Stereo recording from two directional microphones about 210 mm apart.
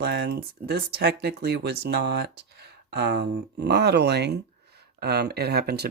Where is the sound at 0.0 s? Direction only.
50° right (ahead or behind).